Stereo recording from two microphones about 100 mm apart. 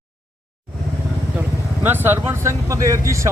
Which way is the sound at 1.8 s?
20° right (ahead or behind).